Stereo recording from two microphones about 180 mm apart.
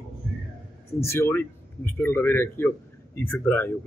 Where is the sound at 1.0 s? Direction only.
15° left (ahead or behind).